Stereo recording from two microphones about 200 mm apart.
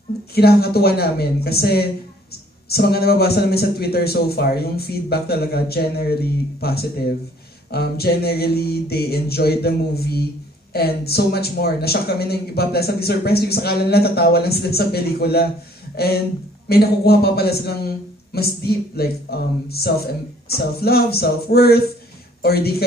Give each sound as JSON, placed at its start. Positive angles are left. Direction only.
{"t": 0.3, "sound": "speech", "side_deg": 50}
{"t": 16.6, "sound": "speech", "side_deg": 50}